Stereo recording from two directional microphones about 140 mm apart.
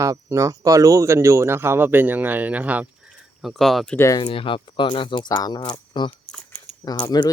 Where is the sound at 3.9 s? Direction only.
20° left (ahead or behind).